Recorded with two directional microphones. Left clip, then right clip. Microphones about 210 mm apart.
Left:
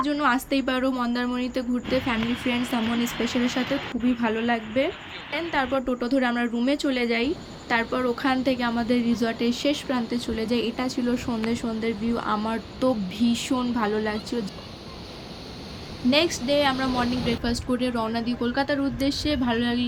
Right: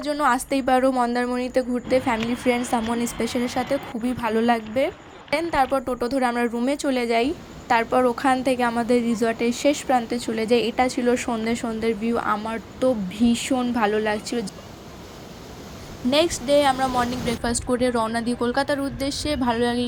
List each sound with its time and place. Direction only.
0.0 s a woman's voice: 30° right (ahead or behind)
12.4 s speech: centre (ahead or behind)
13.7 s speech: 15° right (ahead or behind)
16.0 s a woman's voice: 30° right (ahead or behind)